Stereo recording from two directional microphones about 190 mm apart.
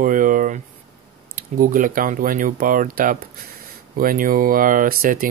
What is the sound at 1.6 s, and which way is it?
Speech, 45° right (ahead or behind).